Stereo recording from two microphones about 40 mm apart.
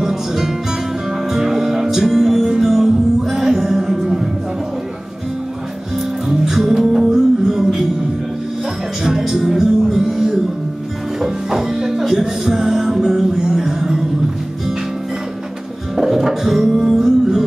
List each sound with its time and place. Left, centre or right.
0.0 s music: centre
6.2 s music: centre
9.1 s music: centre
9.9 s a sound: centre
11.1 s music: centre
16.0 s music: centre